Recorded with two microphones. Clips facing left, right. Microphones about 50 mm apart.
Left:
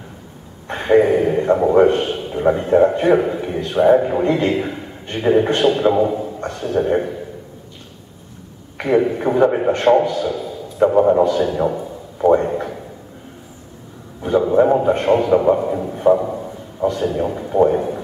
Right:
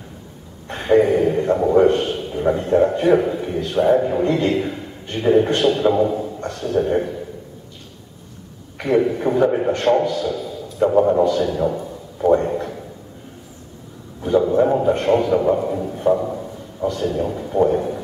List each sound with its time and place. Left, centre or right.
0.7 s a man's voice: centre
8.8 s a man's voice: centre
14.2 s a sound: centre
14.5 s a man's voice: centre